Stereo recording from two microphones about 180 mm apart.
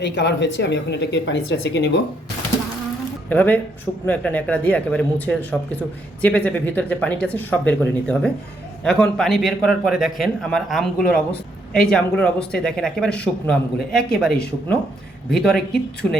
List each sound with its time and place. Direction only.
0.0 s speech: 70° left (ahead or behind)
3.2 s a man's voice: 10° left (ahead or behind)